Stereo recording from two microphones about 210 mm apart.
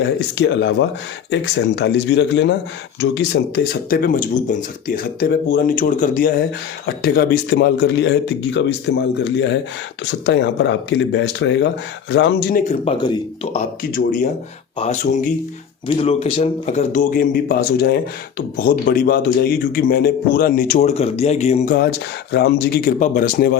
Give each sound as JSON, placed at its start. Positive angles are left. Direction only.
{"t": 0.0, "sound": "a man's voice", "side_deg": 60}
{"t": 13.5, "sound": "a man's voice", "side_deg": 35}
{"t": 16.0, "sound": "a man's voice", "side_deg": 30}